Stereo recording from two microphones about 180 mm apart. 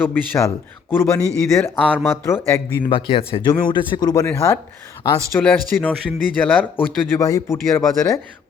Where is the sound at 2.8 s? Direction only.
30° left (ahead or behind); by 6.6 s 10° left (ahead or behind).